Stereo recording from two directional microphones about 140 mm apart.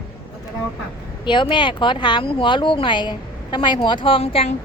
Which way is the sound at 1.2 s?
35° left (ahead or behind).